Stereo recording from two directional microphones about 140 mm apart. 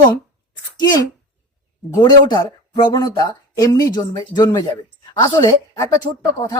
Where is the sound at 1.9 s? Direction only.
30° left (ahead or behind).